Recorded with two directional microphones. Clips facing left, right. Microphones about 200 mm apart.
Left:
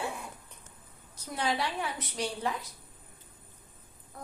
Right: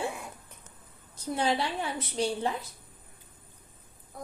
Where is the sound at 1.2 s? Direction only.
30° right (ahead or behind).